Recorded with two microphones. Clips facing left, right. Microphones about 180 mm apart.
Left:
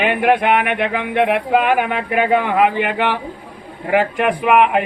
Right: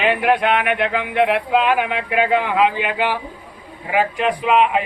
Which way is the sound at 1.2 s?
55° left (ahead or behind).